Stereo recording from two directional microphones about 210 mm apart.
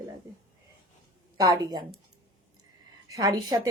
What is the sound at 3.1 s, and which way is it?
Speech, 15° right (ahead or behind).